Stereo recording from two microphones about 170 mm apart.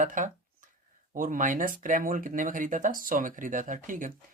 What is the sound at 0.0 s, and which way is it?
Speech, 50° right (ahead or behind).